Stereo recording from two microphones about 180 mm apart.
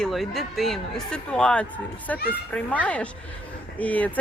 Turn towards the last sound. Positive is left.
turn(degrees=10)  # may be behind; listen again after turning